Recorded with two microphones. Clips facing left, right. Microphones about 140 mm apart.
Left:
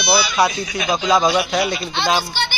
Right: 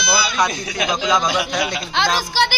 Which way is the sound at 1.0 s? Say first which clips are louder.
Left 4 dB; 30° left (ahead or behind).